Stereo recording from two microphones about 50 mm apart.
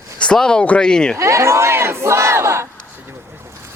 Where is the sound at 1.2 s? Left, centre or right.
Right.